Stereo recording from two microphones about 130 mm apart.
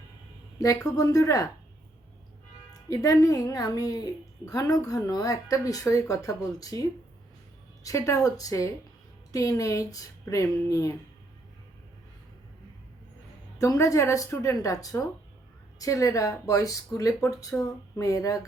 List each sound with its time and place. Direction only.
0.9 s speech: 30° left (ahead or behind)
2.9 s speech: 25° left (ahead or behind)
7.9 s speech: 25° left (ahead or behind)
13.6 s speech: 25° left (ahead or behind)